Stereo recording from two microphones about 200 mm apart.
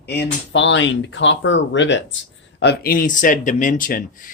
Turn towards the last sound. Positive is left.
turn(degrees=40)  # may be behind; listen again after turning